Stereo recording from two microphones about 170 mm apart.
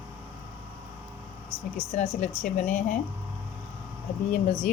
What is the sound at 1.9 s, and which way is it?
A woman's voice, 45° left (ahead or behind).